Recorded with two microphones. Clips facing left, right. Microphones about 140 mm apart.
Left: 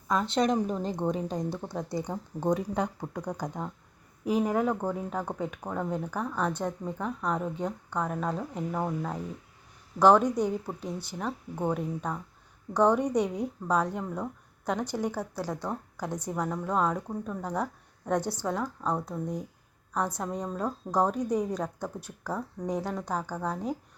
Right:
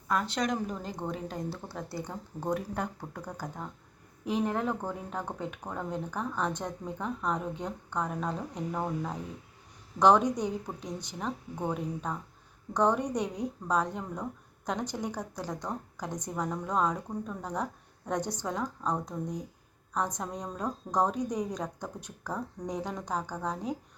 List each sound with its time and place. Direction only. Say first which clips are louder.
0.1 s a woman's voice: left 4 dB; 25° left (ahead or behind)
12.7 s a woman's voice: left 4 dB; 10° left (ahead or behind)